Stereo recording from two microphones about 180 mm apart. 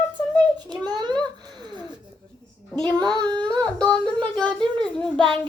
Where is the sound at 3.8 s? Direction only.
5° left (ahead or behind).